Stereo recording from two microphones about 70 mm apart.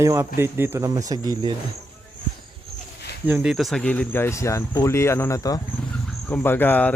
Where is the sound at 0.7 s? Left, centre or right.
Right.